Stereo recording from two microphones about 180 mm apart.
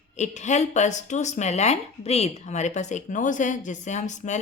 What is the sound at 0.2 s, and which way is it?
Speech, 40° left (ahead or behind).